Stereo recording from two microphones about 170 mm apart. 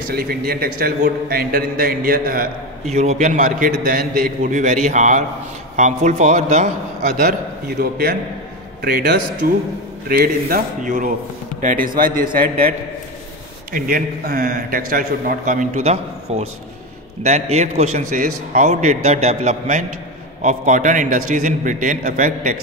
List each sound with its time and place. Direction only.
0.1 s a man's voice: 65° right (ahead or behind)
2.9 s a man's voice: 45° right (ahead or behind)
7.2 s a man's voice: 65° right (ahead or behind); by 22.6 s 50° right (ahead or behind)